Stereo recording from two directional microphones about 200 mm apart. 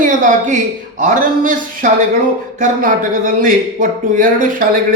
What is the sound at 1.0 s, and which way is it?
A man's voice, 40° right (ahead or behind).